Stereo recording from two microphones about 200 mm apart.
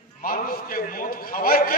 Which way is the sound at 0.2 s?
45° left (ahead or behind).